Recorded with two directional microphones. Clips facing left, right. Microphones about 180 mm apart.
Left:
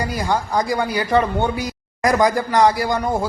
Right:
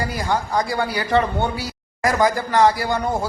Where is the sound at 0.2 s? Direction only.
15° left (ahead or behind).